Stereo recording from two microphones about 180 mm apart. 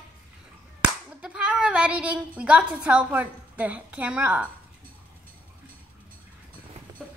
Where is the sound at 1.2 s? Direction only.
5° right (ahead or behind).